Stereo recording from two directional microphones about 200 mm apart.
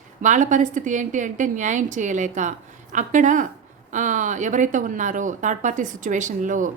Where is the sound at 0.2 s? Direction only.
40° right (ahead or behind).